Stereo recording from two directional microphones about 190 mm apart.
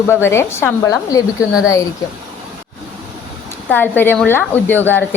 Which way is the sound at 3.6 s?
10° left (ahead or behind).